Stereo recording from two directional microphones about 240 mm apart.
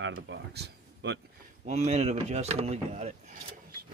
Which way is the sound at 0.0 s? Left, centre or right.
Right.